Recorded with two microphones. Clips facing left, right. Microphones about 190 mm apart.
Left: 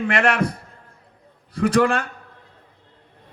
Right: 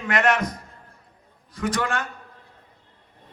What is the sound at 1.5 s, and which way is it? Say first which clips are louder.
Speech: left 8 dB; 30° left (ahead or behind).